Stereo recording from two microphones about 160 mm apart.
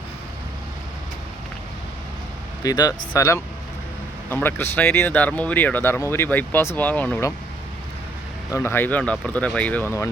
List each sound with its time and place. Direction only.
2.6 s speech: 25° left (ahead or behind)
8.5 s speech: 15° left (ahead or behind)